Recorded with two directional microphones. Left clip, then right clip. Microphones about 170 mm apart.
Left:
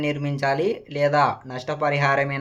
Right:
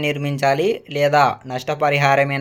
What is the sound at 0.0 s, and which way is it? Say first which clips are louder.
Speech: right 5 dB; 20° right (ahead or behind).